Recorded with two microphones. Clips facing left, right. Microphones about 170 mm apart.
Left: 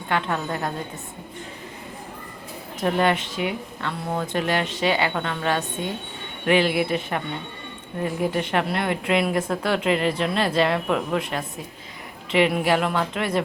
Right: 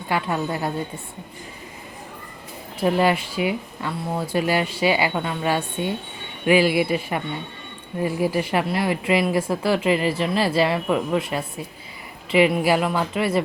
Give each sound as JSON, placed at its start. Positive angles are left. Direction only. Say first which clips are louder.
{"t": 0.1, "sound": "speech", "louder": "right 1 dB", "side_deg": -5}
{"t": 2.8, "sound": "speech", "louder": "right 2 dB", "side_deg": -5}